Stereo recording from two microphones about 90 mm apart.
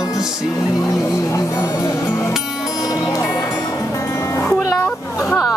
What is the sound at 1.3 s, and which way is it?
Music, 35° left (ahead or behind).